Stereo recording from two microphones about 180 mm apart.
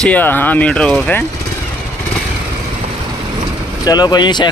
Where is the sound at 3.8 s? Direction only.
25° left (ahead or behind).